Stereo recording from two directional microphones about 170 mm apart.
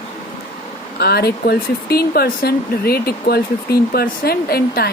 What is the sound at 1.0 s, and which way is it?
A woman's voice, 65° left (ahead or behind).